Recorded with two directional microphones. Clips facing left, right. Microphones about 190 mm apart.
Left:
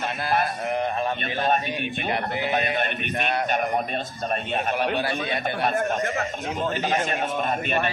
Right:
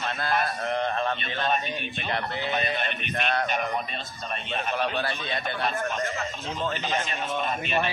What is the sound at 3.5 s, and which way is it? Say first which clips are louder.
A man's voice: left 4 dB; 50° left (ahead or behind).